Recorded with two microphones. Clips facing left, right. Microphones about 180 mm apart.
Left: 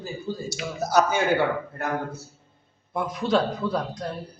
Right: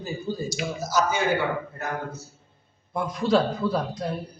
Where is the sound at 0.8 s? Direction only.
60° left (ahead or behind).